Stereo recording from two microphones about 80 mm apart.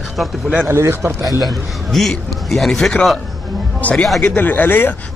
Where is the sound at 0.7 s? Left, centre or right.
Right.